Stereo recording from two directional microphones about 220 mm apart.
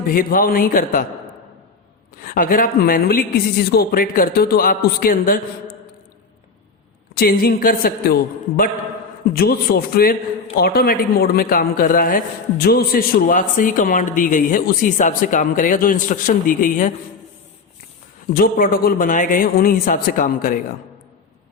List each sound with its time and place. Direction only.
0.1 s a man's voice: 40° left (ahead or behind)
2.2 s a man's voice: 40° left (ahead or behind)
7.2 s a man's voice: 45° left (ahead or behind)
18.3 s a man's voice: 40° left (ahead or behind)